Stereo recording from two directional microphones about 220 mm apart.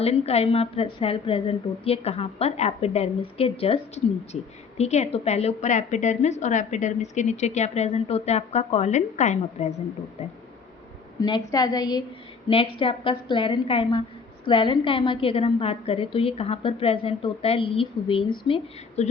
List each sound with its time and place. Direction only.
0.0 s a woman's voice: 30° left (ahead or behind)
11.2 s a woman's voice: 20° left (ahead or behind)